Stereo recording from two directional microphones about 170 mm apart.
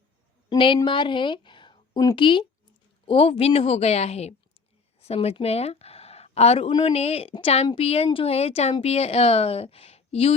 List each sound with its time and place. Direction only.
0.5 s a woman's voice: 30° left (ahead or behind)